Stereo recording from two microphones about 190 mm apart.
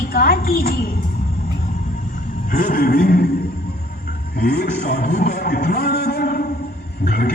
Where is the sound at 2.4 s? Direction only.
45° left (ahead or behind).